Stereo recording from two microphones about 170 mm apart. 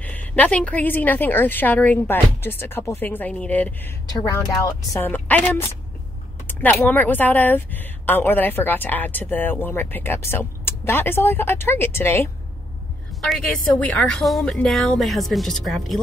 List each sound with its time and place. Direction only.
0.0 s speech: 10° left (ahead or behind)
4.1 s speech: 20° left (ahead or behind)
13.2 s a woman's voice: 5° left (ahead or behind)